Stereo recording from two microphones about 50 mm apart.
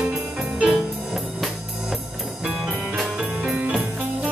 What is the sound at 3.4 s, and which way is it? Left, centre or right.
Music, centre.